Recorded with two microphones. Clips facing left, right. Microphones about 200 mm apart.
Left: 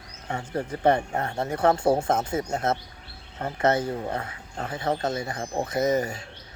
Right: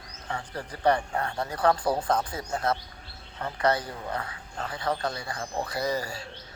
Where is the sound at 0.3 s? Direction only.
25° left (ahead or behind).